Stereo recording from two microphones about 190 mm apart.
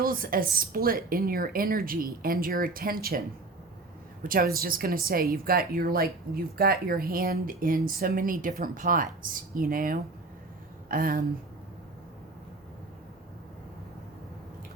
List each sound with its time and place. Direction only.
0.0 s speech: 50° right (ahead or behind)
4.2 s speech: 50° right (ahead or behind)